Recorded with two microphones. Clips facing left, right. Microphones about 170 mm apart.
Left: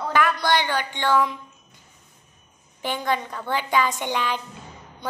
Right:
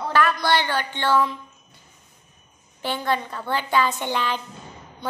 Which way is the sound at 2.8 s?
15° left (ahead or behind).